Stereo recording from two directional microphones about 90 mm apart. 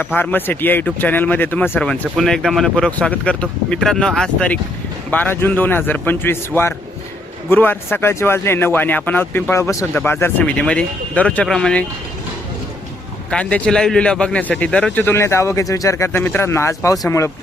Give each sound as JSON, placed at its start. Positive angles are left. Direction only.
{"t": 0.0, "sound": "speech", "side_deg": 20}
{"t": 1.8, "sound": "speech", "side_deg": 5}
{"t": 5.1, "sound": "speech", "side_deg": 25}
{"t": 10.1, "sound": "speech", "side_deg": 25}
{"t": 13.3, "sound": "speech", "side_deg": 10}
{"t": 15.0, "sound": "speech", "side_deg": 30}